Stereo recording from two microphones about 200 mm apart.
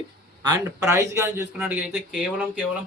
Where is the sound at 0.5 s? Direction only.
10° right (ahead or behind).